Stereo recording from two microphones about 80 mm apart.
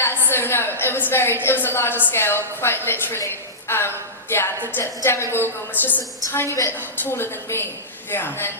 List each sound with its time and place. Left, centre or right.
0.0 s a woman's voice: left